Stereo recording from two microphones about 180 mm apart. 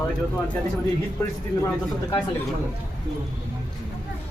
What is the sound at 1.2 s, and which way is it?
Speech, 15° left (ahead or behind).